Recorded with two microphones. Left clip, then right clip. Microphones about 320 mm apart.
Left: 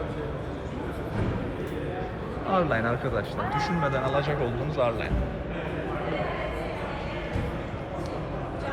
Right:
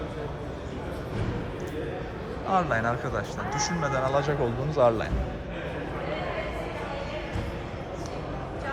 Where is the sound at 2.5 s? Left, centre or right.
Centre.